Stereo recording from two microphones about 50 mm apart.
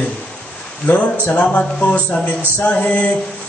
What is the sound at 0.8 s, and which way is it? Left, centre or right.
Speech, left.